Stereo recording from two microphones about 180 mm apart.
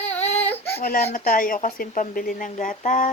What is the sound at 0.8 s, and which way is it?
Speech, 55° left (ahead or behind).